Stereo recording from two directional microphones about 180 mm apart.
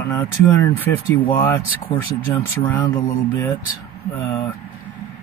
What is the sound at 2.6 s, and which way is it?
Speech, 10° left (ahead or behind).